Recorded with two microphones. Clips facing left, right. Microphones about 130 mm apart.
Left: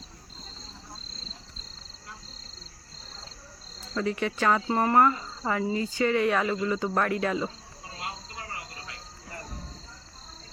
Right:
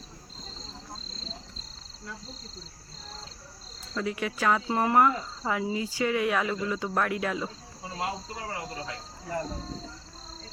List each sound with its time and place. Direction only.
3.9 s speech: 5° right (ahead or behind)
8.0 s cricket: 85° right